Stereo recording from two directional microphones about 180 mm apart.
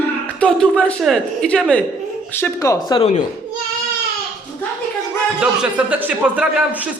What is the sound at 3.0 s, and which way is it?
Speech, 40° left (ahead or behind).